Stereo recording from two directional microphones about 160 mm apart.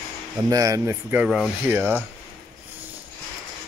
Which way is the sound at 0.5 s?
20° right (ahead or behind).